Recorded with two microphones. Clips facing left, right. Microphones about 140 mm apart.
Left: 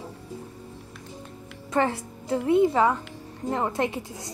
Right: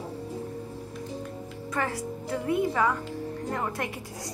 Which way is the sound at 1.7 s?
25° left (ahead or behind).